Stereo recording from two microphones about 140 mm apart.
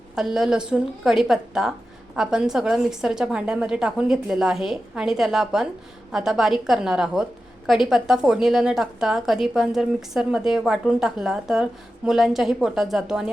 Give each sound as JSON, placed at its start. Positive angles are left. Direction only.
{"t": 0.2, "sound": "a woman's voice", "side_deg": -5}